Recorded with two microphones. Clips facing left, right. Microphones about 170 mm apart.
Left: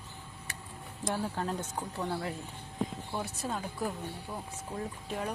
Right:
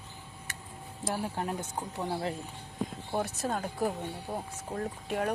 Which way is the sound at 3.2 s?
50° right (ahead or behind).